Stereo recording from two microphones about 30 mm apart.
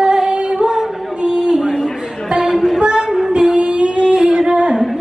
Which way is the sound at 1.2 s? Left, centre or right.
Right.